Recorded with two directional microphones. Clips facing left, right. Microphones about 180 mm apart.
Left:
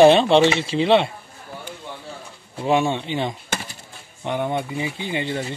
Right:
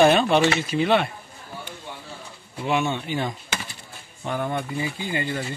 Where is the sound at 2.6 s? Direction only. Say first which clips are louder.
Left 4 dB; 35° left (ahead or behind).